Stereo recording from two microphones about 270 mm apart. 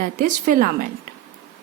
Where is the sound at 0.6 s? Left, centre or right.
Right.